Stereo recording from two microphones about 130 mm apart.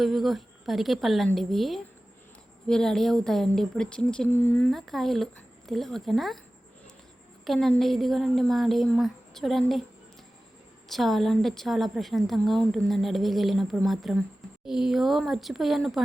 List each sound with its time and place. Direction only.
0.0 s a woman's voice: centre (ahead or behind); by 4.6 s 15° left (ahead or behind)
4.7 s a woman's voice: centre (ahead or behind)
7.4 s a woman's voice: centre (ahead or behind)
10.8 s a woman's voice: centre (ahead or behind)